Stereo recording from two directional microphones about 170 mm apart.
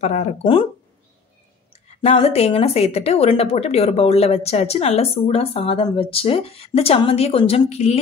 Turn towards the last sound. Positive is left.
turn(degrees=40)  # may be behind; listen again after turning